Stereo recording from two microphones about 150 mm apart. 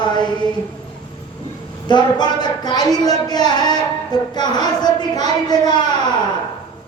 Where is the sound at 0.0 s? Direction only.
30° left (ahead or behind).